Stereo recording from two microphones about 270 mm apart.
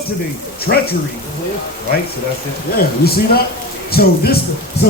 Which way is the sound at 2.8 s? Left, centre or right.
Left.